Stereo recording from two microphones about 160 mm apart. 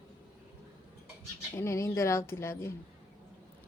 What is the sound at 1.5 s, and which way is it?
A woman's voice, 15° left (ahead or behind).